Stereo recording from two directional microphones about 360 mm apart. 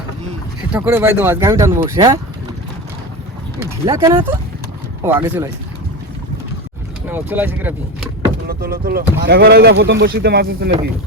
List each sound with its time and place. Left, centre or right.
0.7 s speech: centre
3.6 s speech: centre
7.1 s speech: centre
8.4 s speech: right